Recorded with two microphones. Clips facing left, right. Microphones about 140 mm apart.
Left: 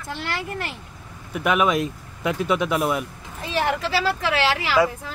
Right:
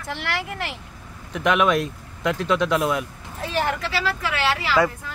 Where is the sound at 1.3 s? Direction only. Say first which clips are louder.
Right 1 dB; 5° left (ahead or behind).